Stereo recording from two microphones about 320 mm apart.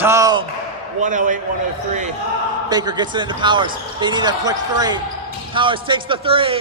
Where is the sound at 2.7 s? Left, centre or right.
Centre.